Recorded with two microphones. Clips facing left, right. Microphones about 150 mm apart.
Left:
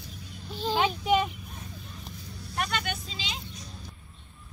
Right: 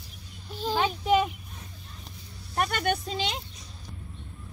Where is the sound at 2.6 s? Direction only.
50° right (ahead or behind).